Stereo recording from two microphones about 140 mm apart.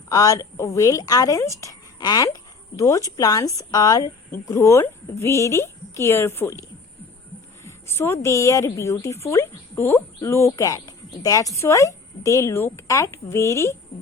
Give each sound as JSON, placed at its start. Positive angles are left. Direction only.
{"t": 0.1, "sound": "a woman's voice", "side_deg": 25}